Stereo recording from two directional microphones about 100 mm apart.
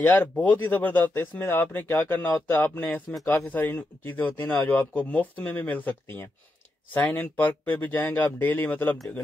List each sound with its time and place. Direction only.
0.0 s speech: 15° left (ahead or behind)